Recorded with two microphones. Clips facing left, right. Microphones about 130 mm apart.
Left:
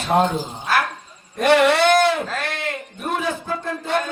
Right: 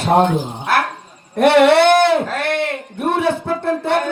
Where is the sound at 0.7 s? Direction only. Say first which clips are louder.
Right 3 dB; 65° right (ahead or behind).